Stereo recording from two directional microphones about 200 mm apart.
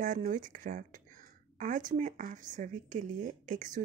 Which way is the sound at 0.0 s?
40° right (ahead or behind).